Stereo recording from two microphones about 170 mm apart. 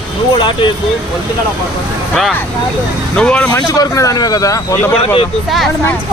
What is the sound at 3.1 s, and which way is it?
Speech, 5° left (ahead or behind).